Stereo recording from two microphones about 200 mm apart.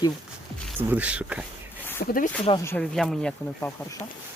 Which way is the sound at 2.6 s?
10° left (ahead or behind).